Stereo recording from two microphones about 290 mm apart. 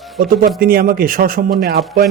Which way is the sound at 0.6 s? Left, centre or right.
Right.